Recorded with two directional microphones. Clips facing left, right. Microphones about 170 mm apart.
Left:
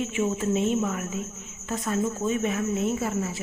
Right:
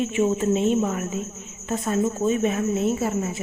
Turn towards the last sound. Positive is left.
turn(degrees=-25)  # may be behind; listen again after turning